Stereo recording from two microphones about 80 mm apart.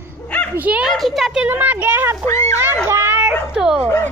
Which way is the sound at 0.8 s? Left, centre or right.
Centre.